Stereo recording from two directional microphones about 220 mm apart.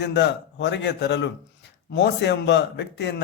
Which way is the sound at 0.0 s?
50° left (ahead or behind).